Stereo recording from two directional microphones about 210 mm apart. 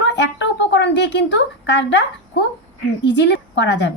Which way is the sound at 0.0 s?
55° left (ahead or behind).